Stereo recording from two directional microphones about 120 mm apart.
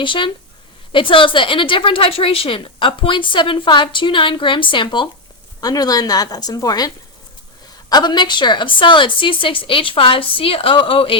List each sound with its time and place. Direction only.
0.0 s a woman's voice: 45° left (ahead or behind)